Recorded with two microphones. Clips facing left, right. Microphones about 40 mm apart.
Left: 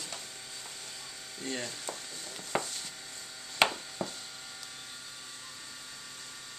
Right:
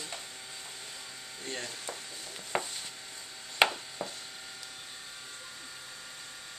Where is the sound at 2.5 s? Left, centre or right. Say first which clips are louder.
Even; centre.